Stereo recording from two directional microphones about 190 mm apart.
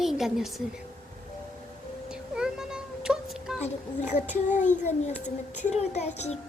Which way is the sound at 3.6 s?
40° left (ahead or behind).